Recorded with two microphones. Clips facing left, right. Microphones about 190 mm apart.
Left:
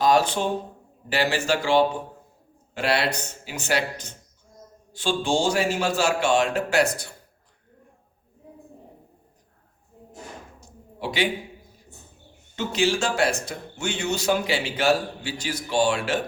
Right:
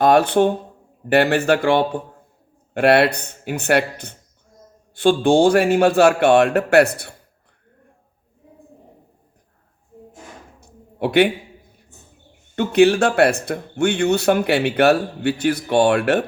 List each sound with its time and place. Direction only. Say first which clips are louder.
0.0 s speech: right 6 dB; 60° right (ahead or behind)
10.6 s a sound: right 10 dB; 60° right (ahead or behind)
12.5 s speech: right 10 dB; 60° right (ahead or behind)